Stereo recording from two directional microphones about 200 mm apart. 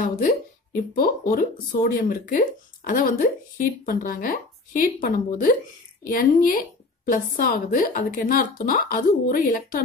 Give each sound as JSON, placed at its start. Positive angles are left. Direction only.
{"t": 0.9, "sound": "speech", "side_deg": 45}